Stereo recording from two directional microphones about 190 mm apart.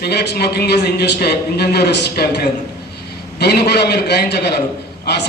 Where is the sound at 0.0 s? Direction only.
60° left (ahead or behind).